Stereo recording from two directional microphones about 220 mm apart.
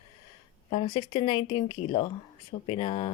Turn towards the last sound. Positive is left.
turn(degrees=25)  # may be behind; listen again after turning